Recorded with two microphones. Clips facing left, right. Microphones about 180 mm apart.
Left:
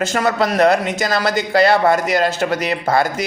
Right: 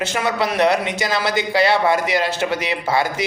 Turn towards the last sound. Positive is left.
turn(degrees=45)  # may be behind; listen again after turning